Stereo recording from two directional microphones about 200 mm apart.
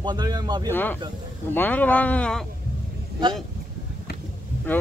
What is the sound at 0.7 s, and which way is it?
Music, 10° left (ahead or behind).